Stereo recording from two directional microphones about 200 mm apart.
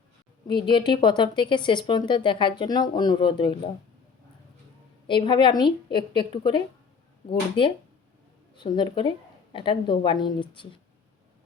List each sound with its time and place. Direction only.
0.4 s a woman's voice: 25° left (ahead or behind)
5.0 s a woman's voice: 25° left (ahead or behind)